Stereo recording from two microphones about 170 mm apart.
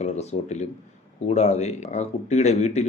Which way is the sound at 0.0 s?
40° left (ahead or behind).